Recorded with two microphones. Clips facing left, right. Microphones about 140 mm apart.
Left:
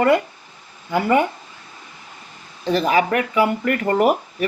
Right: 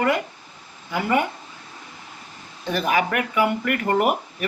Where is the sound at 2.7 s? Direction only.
25° left (ahead or behind).